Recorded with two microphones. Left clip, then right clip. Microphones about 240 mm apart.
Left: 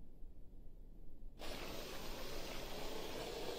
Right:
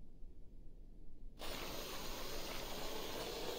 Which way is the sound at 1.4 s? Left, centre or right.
Centre.